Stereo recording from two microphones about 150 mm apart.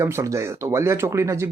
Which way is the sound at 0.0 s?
20° right (ahead or behind).